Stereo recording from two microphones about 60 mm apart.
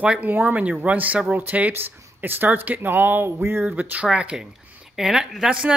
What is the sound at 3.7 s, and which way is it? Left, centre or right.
A woman's voice, right.